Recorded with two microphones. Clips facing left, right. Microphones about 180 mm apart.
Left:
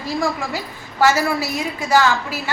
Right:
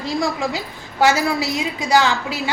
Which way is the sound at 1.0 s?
15° right (ahead or behind).